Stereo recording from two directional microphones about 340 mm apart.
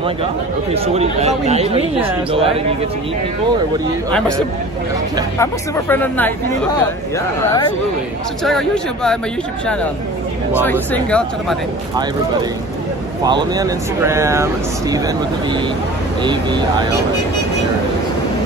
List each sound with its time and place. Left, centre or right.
0.9 s speech: centre
5.4 s speech: centre
8.5 s speech: centre
10.6 s speech: centre
13.2 s speech: centre
16.2 s speech: centre